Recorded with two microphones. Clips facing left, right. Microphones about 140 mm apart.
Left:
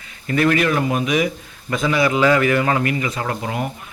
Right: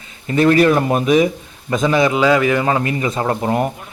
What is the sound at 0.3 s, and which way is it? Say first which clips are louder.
Speech: right 5 dB; 30° right (ahead or behind).